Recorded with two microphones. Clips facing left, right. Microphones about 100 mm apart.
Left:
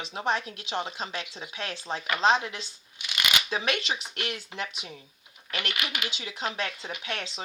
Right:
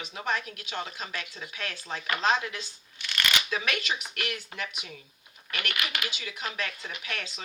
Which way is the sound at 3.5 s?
30° left (ahead or behind).